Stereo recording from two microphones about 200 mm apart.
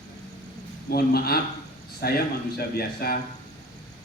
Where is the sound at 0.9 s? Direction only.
50° left (ahead or behind).